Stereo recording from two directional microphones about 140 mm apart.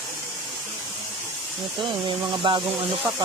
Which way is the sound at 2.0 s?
35° right (ahead or behind).